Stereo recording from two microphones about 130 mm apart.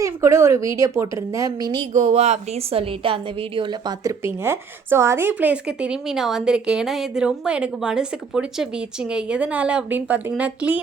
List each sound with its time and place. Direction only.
0.0 s a woman's voice: 20° right (ahead or behind)
1.9 s a woman's voice: 60° right (ahead or behind); by 10.8 s 10° right (ahead or behind)